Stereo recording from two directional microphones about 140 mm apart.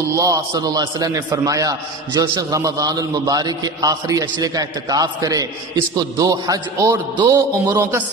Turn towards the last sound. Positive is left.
turn(degrees=-30)  # may be behind; listen again after turning